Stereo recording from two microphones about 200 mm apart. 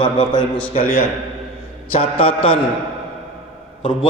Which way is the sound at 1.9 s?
25° left (ahead or behind).